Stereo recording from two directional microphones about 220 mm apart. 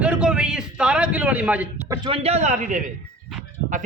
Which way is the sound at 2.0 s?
25° right (ahead or behind).